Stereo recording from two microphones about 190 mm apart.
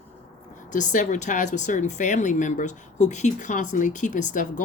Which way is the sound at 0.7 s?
40° left (ahead or behind).